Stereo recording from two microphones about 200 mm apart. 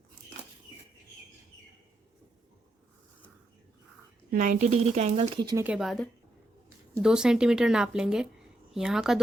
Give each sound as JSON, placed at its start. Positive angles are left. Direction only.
{"t": 4.3, "sound": "speech", "side_deg": -40}
{"t": 5.6, "sound": "speech", "side_deg": 0}